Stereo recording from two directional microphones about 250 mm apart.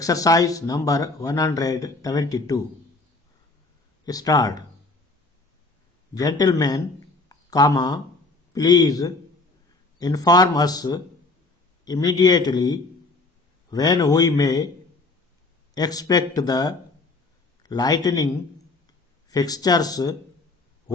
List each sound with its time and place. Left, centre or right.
0.0 s speech: centre
4.0 s speech: centre
6.1 s speech: centre
15.7 s speech: centre